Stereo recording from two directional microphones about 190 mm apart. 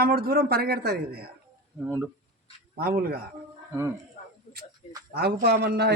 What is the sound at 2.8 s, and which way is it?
Speech, 55° right (ahead or behind).